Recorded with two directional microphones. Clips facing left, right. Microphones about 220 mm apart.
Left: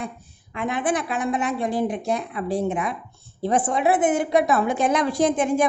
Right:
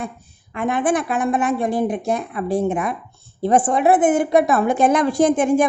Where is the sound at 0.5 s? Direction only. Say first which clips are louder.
Right 4 dB; 50° right (ahead or behind).